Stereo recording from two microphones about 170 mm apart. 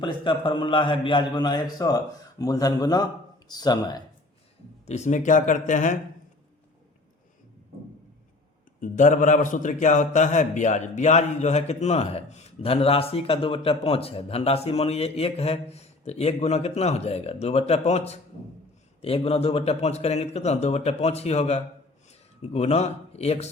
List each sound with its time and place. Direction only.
0.0 s a man's voice: 30° left (ahead or behind)
4.9 s speech: 45° left (ahead or behind)
8.8 s a man's voice: 50° left (ahead or behind)